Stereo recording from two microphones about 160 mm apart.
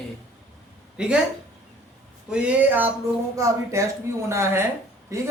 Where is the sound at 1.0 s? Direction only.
5° right (ahead or behind).